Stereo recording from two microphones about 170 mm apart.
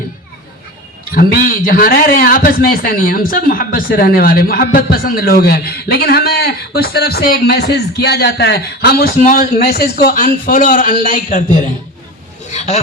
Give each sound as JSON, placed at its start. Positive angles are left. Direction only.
{"t": 1.1, "sound": "a man's voice", "side_deg": 60}
{"t": 9.1, "sound": "a man's voice", "side_deg": 45}